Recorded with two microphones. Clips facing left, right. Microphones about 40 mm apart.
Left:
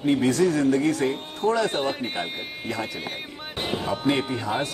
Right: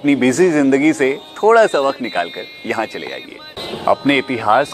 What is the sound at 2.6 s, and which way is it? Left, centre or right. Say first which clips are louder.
Speech: right 10 dB; right.